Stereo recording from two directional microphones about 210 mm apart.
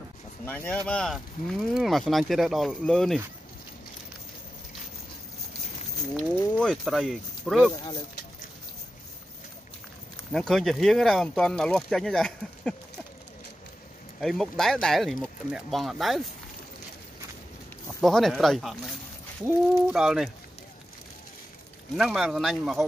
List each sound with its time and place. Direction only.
0.5 s speech: 10° left (ahead or behind)
6.6 s speech: centre (ahead or behind)
7.7 s speech: 20° left (ahead or behind)
10.3 s speech: centre (ahead or behind)
14.2 s speech: centre (ahead or behind)
18.0 s speech: centre (ahead or behind)
21.9 s speech: centre (ahead or behind)